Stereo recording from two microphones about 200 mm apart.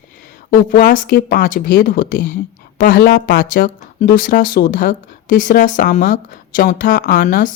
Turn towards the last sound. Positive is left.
turn(degrees=40)  # may be behind; listen again after turning